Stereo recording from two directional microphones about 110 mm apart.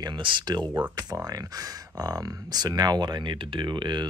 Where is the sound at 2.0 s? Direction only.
35° right (ahead or behind).